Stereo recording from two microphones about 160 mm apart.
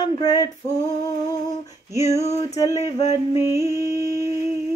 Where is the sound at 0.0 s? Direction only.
25° left (ahead or behind).